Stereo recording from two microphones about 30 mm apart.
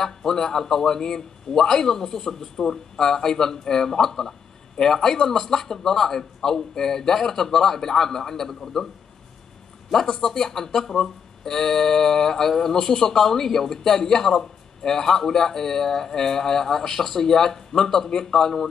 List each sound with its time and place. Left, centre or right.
0.0 s a man's voice: centre
10.2 s a man's voice: centre